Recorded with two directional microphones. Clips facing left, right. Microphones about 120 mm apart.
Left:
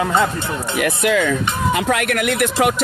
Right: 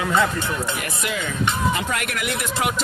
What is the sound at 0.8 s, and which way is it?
Speech, 70° left (ahead or behind).